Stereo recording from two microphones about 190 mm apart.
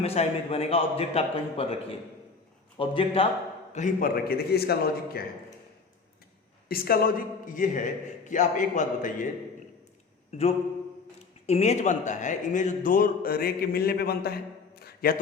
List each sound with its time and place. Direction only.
0.0 s a man's voice: 30° left (ahead or behind)
3.7 s a man's voice: 40° left (ahead or behind)
6.7 s a man's voice: 50° left (ahead or behind)
10.3 s a man's voice: 35° left (ahead or behind); by 14.3 s 55° left (ahead or behind)
14.8 s a sound: 55° left (ahead or behind)